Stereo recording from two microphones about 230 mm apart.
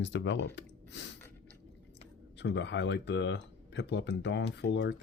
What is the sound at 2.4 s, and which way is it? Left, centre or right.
Speech, left.